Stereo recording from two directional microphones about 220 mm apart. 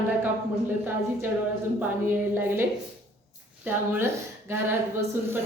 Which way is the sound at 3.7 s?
10° right (ahead or behind).